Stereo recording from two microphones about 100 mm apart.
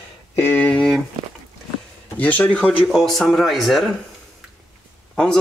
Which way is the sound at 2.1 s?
15° left (ahead or behind).